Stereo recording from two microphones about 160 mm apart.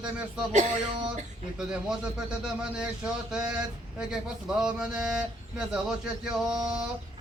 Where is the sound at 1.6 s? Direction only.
5° right (ahead or behind).